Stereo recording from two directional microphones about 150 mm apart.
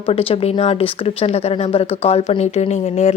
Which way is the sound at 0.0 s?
40° left (ahead or behind).